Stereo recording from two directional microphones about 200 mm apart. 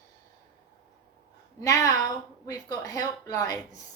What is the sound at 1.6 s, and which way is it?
A woman's voice, 15° left (ahead or behind).